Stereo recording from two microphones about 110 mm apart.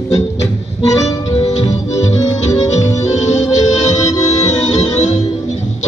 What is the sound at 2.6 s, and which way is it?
Music, 90° left.